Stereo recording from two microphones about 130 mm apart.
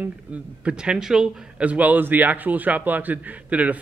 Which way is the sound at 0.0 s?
10° right (ahead or behind).